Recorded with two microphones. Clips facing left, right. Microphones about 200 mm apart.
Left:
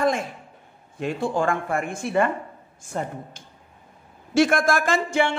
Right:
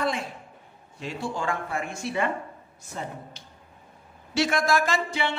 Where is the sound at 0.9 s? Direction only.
50° left (ahead or behind).